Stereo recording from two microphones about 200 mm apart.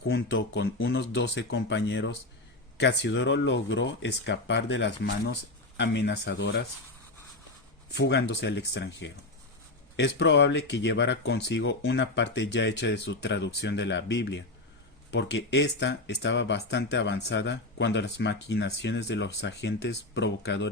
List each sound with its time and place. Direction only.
0.1 s speech: 65° left (ahead or behind)
7.9 s speech: 60° left (ahead or behind)